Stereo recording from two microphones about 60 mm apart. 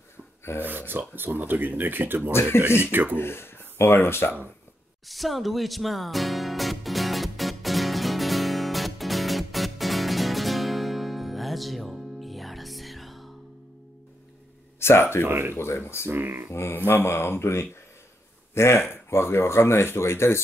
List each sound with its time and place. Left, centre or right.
0.7 s speech: right
3.2 s speech: left
5.0 s music: centre
14.8 s speech: left
15.2 s speech: right
15.5 s speech: left
16.1 s speech: right
16.5 s speech: left